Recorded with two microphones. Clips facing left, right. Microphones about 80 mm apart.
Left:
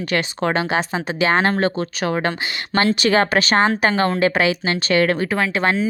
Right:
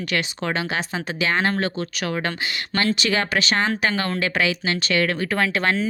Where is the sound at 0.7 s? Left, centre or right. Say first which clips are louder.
Left 5 dB; left.